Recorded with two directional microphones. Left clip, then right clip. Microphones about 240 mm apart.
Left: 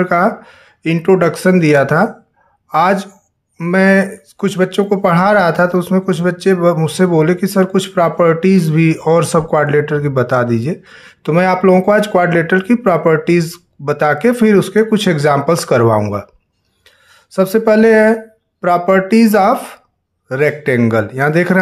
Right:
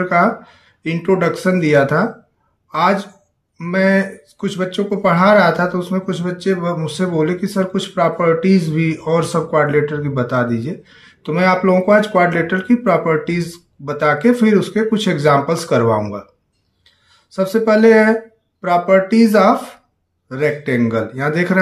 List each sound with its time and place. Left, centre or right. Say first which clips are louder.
0.0 s speech: left 2 dB; left